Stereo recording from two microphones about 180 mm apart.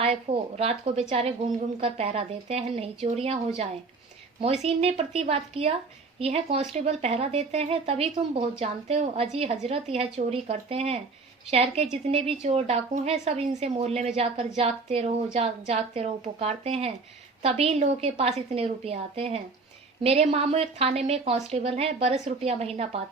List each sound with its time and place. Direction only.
0.0 s a woman's voice: 35° right (ahead or behind)
4.6 s a woman's voice: 35° right (ahead or behind)